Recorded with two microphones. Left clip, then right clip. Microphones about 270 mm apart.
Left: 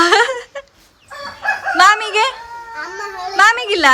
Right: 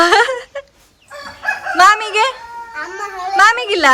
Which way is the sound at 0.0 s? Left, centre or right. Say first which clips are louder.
Right 1 dB; centre.